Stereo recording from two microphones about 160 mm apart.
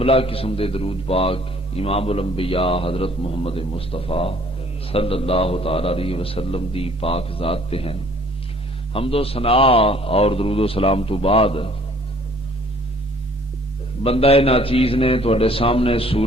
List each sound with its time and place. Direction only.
0.0 s a man's voice: 35° left (ahead or behind)
14.0 s a man's voice: 35° left (ahead or behind)